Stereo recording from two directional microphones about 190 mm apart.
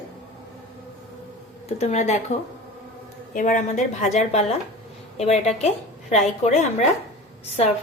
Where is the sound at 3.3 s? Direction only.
40° left (ahead or behind).